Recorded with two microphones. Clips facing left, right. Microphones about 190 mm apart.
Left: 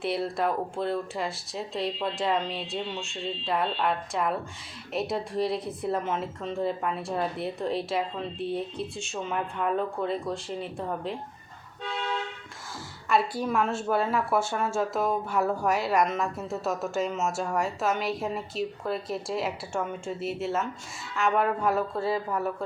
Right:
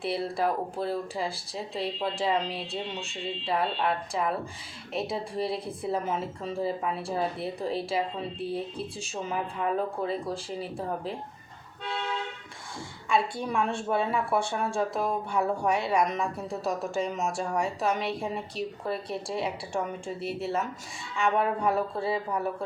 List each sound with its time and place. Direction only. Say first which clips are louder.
0.0 s speech: left 1 dB; centre (ahead or behind)
13.1 s speech: left 2 dB; 5° left (ahead or behind)